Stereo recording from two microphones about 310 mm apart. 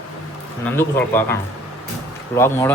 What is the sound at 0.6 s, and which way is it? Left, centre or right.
A man's voice, centre.